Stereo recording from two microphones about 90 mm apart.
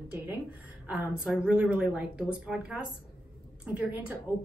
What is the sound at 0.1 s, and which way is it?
A woman's voice, 15° right (ahead or behind).